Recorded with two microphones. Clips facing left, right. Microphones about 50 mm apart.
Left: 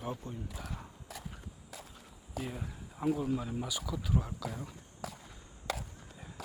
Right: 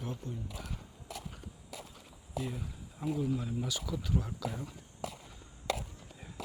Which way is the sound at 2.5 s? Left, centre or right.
Left.